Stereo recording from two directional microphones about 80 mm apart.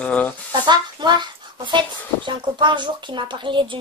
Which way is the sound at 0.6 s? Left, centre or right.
Right.